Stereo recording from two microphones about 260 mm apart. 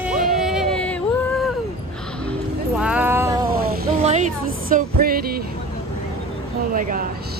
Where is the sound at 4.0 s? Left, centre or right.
Right.